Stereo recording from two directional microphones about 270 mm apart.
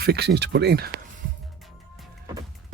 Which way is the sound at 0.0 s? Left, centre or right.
Right.